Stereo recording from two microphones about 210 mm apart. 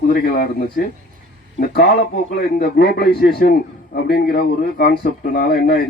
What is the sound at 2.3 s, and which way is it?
Speech, 50° left (ahead or behind).